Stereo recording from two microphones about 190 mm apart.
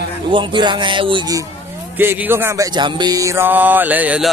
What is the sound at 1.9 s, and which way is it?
Music, 10° right (ahead or behind).